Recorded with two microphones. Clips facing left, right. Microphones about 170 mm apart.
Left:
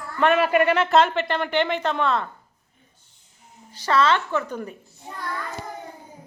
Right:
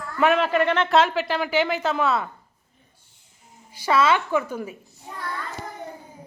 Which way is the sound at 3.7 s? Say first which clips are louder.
Even; 10° right (ahead or behind).